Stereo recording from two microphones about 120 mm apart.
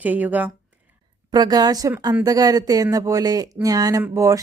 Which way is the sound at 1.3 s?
35° right (ahead or behind).